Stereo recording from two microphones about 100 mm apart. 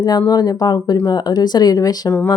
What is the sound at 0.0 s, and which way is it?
A woman's voice, 45° left (ahead or behind).